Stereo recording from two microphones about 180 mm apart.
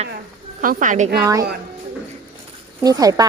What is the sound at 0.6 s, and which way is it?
Speech, 45° right (ahead or behind).